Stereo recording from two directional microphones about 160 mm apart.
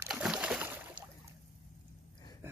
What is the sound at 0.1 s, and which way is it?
Boat, 5° right (ahead or behind).